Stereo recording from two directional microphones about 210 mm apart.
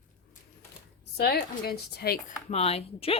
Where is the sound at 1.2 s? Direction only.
50° left (ahead or behind).